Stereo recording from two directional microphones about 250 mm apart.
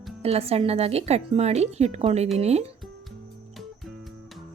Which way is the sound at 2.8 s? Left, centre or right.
Centre.